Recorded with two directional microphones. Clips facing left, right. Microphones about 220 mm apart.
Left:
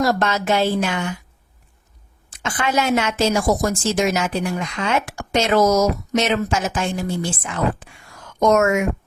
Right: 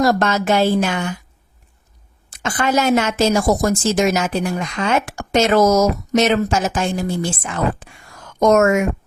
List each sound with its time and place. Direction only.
0.0 s a woman's voice: 45° right (ahead or behind)
2.4 s a woman's voice: 40° right (ahead or behind)